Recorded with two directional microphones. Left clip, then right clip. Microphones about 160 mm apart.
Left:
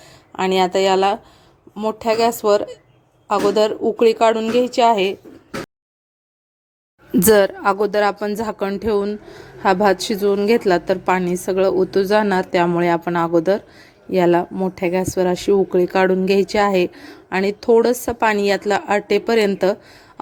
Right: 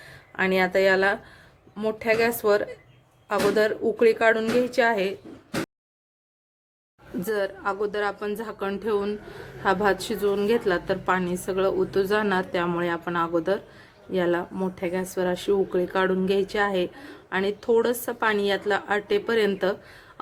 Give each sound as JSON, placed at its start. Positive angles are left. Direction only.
{"t": 0.0, "sound": "speech", "side_deg": 35}
{"t": 1.7, "sound": "a woman's voice", "side_deg": 20}
{"t": 7.3, "sound": "a woman's voice", "side_deg": 55}